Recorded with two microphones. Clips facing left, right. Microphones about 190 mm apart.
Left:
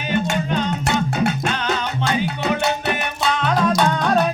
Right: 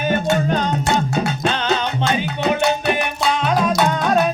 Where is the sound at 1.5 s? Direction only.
25° right (ahead or behind).